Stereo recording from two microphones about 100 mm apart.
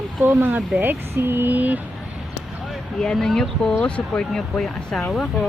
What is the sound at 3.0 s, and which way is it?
Speech, 5° left (ahead or behind).